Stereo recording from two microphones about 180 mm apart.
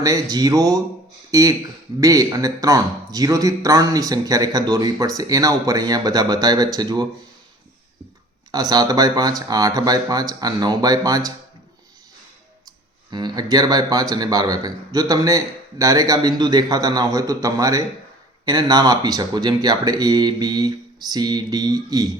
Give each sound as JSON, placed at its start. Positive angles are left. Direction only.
{"t": 0.0, "sound": "a man's voice", "side_deg": -20}
{"t": 8.5, "sound": "a man's voice", "side_deg": -20}
{"t": 13.1, "sound": "a man's voice", "side_deg": -25}